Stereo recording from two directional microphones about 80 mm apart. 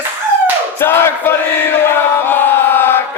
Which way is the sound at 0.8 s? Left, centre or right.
Left.